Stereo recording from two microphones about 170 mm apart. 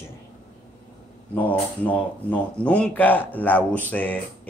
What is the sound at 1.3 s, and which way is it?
Speech, 10° left (ahead or behind).